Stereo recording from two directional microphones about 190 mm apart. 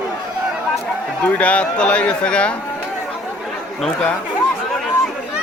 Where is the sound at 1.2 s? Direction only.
5° left (ahead or behind).